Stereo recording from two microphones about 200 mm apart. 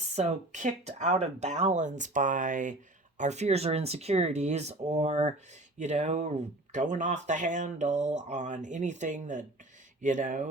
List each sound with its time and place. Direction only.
0.0 s speech: 35° right (ahead or behind)